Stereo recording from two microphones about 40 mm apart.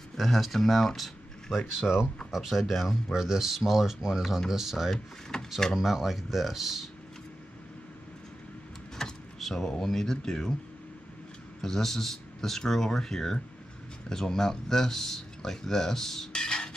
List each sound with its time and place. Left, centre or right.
0.2 s speech: centre
5.3 s door: centre
5.8 s speech: centre
9.0 s power windows: centre
9.4 s a sound: centre
9.7 s speech: centre
11.6 s speech: centre
16.3 s music: left